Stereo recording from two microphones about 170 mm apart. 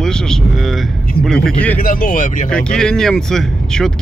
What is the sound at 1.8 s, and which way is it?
Speech, 55° left (ahead or behind).